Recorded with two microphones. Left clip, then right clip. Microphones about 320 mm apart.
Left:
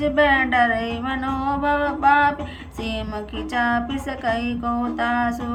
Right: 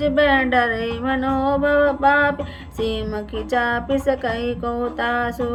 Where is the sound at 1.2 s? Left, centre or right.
Centre.